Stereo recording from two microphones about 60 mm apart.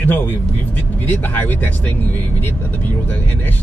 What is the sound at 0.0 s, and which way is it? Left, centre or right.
Speech, left.